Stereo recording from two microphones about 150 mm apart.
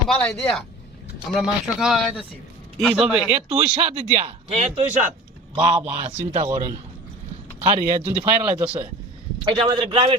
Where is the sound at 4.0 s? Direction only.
50° right (ahead or behind).